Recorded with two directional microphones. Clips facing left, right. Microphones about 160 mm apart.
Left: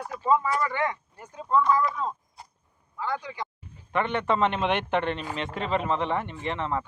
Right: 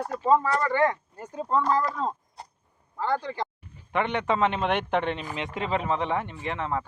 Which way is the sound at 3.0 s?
55° right (ahead or behind).